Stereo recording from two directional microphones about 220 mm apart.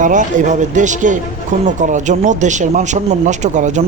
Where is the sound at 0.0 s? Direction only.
35° right (ahead or behind).